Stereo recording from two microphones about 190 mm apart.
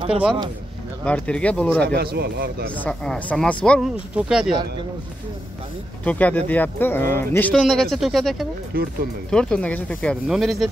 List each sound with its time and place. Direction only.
1.0 s speech: 5° left (ahead or behind)
2.0 s a man's voice: 55° right (ahead or behind)
2.7 s speech: 5° left (ahead or behind)
4.1 s speech: 5° right (ahead or behind)
6.0 s speech: 10° left (ahead or behind)
7.5 s speech: centre (ahead or behind)
8.7 s a man's voice: 55° right (ahead or behind)
9.3 s speech: 5° left (ahead or behind)